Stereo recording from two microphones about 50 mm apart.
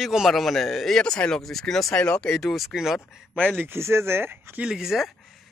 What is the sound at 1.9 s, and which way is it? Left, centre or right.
Speech, left.